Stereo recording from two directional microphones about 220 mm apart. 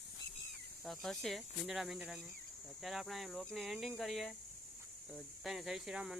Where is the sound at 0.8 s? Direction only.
Centre (ahead or behind).